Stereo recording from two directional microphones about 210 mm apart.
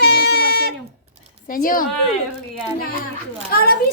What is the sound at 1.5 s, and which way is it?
Speech, 40° left (ahead or behind).